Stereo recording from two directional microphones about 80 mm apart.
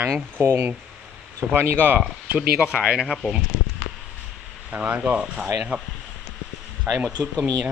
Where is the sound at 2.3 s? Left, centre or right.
Centre.